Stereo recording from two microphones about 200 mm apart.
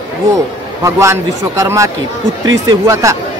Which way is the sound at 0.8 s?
15° right (ahead or behind).